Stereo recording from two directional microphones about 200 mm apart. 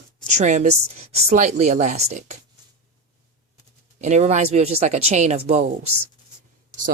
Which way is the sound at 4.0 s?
35° right (ahead or behind).